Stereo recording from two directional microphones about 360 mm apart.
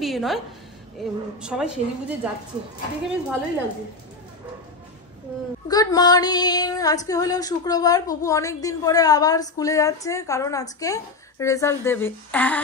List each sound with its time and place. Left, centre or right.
0.0 s a woman's voice: centre
1.4 s a woman's voice: centre
5.7 s female singing: centre